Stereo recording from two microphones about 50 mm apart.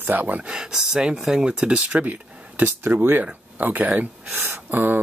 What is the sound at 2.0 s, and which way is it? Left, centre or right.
Speech, right.